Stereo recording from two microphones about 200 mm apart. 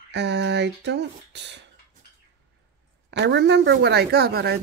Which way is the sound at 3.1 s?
60° right (ahead or behind).